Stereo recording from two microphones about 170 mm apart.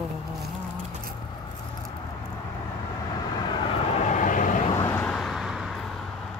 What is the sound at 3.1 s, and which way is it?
Vehicle, 25° left (ahead or behind).